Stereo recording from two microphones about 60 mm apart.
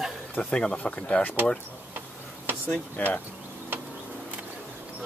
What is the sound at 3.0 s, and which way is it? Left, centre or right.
Speech, left.